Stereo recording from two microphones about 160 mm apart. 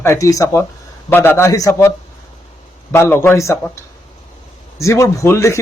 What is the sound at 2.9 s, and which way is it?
Speech, 15° left (ahead or behind).